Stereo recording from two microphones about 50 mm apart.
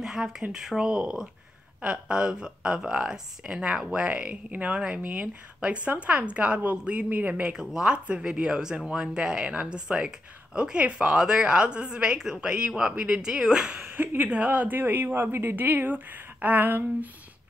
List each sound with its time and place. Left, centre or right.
0.0 s speech: centre; by 7.4 s right
7.4 s speech: centre
13.2 s speech: centre
13.8 s speech: right
14.3 s speech: right